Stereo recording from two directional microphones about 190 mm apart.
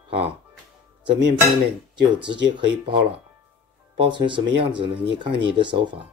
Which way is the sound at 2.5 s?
25° right (ahead or behind).